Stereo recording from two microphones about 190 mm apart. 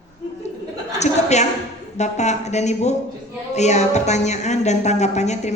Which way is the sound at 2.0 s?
35° left (ahead or behind).